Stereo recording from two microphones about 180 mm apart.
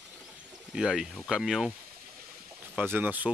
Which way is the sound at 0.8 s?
5° right (ahead or behind).